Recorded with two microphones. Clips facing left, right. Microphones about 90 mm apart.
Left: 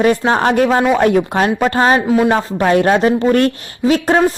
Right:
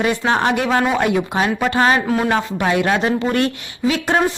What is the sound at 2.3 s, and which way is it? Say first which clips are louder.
Speech: left 4 dB; 40° left (ahead or behind).